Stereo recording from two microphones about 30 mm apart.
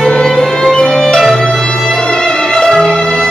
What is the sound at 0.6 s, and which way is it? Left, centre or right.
Music, centre.